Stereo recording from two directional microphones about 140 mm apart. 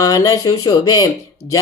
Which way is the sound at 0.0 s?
25° left (ahead or behind).